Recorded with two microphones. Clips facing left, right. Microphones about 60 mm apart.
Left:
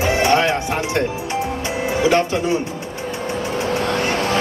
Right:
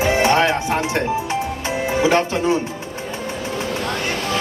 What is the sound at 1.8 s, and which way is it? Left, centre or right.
Speech, right.